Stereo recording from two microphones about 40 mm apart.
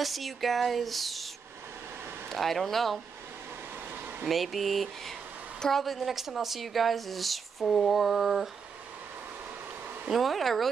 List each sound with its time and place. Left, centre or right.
0.0 s a woman's voice: centre
2.2 s a woman's voice: centre
4.3 s a woman's voice: centre
10.0 s a woman's voice: centre